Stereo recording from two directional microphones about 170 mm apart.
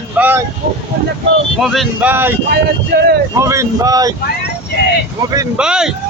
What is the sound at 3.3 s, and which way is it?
Speech, 15° right (ahead or behind).